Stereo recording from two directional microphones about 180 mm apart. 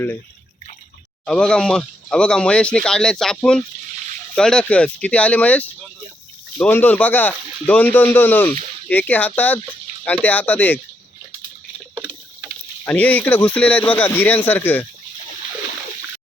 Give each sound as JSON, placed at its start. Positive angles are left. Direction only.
{"t": 1.2, "sound": "speech", "side_deg": 5}
{"t": 12.8, "sound": "speech", "side_deg": 10}